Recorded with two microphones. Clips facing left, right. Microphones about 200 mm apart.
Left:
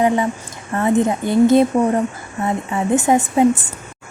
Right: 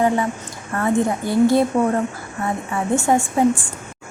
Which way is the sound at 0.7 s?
20° left (ahead or behind).